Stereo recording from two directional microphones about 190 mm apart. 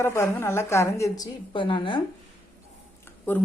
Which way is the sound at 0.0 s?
15° left (ahead or behind).